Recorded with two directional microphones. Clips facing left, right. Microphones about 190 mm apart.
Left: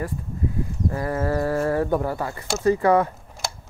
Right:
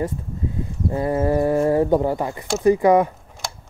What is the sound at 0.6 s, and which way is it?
Speech, 20° right (ahead or behind).